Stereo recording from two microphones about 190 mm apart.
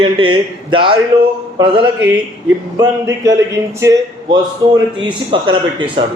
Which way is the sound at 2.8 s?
20° right (ahead or behind).